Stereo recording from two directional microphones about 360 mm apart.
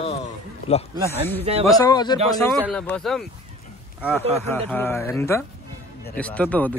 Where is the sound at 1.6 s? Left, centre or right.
Centre.